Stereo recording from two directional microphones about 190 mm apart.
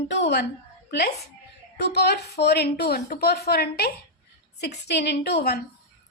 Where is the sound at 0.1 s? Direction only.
65° left (ahead or behind).